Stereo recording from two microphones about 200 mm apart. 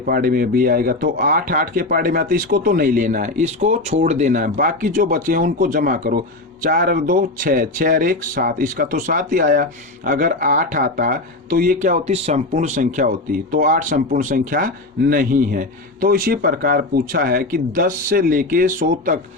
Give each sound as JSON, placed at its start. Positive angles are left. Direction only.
{"t": 0.0, "sound": "speech", "side_deg": -45}